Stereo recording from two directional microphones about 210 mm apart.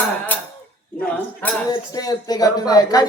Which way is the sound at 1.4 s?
5° left (ahead or behind).